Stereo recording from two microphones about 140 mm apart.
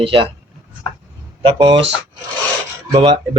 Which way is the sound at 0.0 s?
40° right (ahead or behind).